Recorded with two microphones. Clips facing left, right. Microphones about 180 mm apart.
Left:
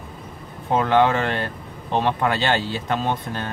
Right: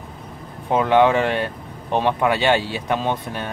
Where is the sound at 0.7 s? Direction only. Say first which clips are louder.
Right 2 dB; 15° right (ahead or behind).